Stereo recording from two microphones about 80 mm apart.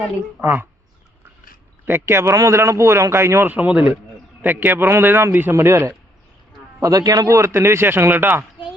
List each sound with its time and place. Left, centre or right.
0.4 s a man's voice: right
1.9 s a man's voice: right
3.5 s a man's voice: centre; by 6.0 s right
6.8 s a man's voice: right